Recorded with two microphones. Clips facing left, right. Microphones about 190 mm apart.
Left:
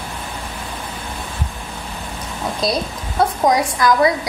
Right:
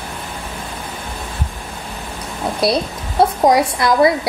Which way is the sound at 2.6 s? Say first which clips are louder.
Right 4 dB; 65° right (ahead or behind).